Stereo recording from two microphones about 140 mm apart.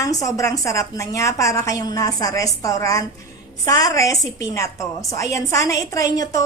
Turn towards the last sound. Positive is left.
turn(degrees=25)  # may be behind; listen again after turning